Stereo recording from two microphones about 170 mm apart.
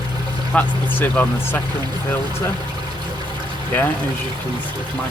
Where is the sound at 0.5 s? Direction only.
10° left (ahead or behind).